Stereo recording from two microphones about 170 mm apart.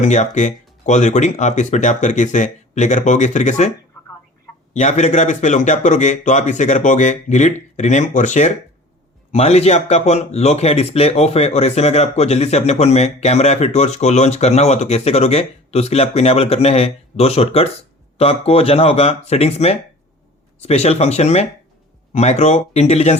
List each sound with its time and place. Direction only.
0.0 s a man's voice: 45° left (ahead or behind)
4.7 s a man's voice: 45° left (ahead or behind)